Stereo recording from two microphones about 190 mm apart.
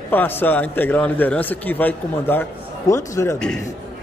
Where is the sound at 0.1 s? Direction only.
10° left (ahead or behind).